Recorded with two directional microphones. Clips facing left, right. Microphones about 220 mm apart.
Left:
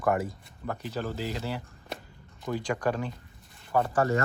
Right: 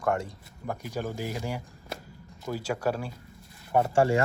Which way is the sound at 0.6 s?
10° right (ahead or behind).